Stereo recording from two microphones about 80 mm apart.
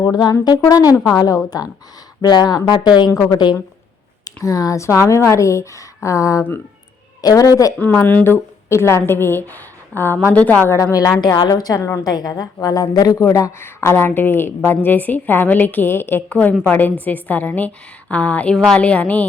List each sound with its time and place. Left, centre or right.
0.0 s a woman's voice: left
2.2 s speech: left
4.4 s a woman's voice: left
7.8 s a woman's voice: left
11.3 s a woman's voice: left
13.2 s a woman's voice: left; by 19.3 s centre